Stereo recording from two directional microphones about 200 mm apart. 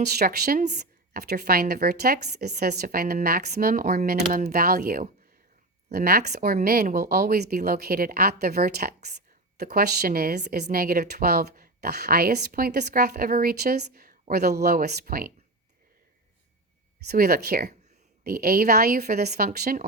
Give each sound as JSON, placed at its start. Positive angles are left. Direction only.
{"t": 0.0, "sound": "speech", "side_deg": -50}
{"t": 17.1, "sound": "speech", "side_deg": -50}